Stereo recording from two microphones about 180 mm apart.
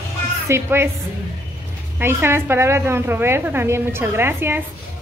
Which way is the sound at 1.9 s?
15° right (ahead or behind).